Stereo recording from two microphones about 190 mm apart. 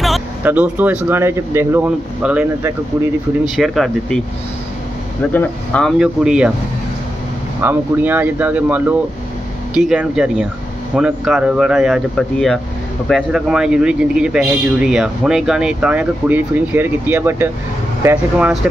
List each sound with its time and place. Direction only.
0.0 s speech: 5° right (ahead or behind)
5.3 s speech: 10° left (ahead or behind)
7.6 s speech: 10° right (ahead or behind)